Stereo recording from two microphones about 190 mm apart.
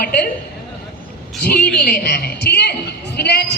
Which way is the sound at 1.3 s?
5° left (ahead or behind).